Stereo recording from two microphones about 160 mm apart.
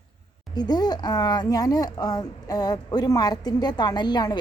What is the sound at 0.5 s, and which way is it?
Speech, 25° left (ahead or behind).